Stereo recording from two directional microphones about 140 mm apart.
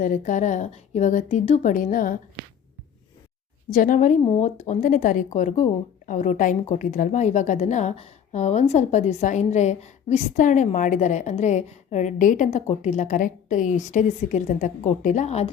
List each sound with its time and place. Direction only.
0.0 s a woman's voice: 65° left (ahead or behind)
3.7 s a woman's voice: 70° left (ahead or behind); by 15.4 s 55° left (ahead or behind)